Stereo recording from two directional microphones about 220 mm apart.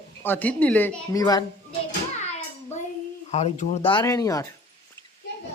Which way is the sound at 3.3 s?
30° left (ahead or behind).